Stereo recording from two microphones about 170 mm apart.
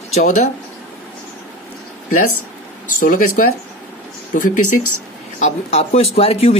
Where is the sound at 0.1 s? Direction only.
45° left (ahead or behind).